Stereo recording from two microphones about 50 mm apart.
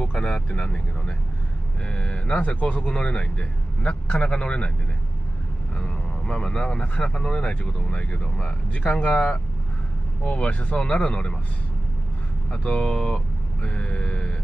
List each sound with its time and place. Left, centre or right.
0.0 s speech: centre
5.8 s speech: centre
12.4 s speech: left